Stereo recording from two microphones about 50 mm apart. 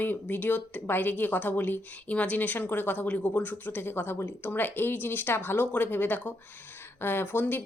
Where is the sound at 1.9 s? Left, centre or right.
Left.